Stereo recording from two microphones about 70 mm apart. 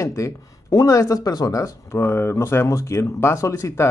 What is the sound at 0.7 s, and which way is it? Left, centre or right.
Speech, left.